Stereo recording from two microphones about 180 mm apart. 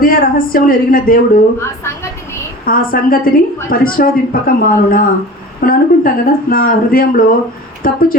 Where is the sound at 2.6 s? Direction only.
50° left (ahead or behind).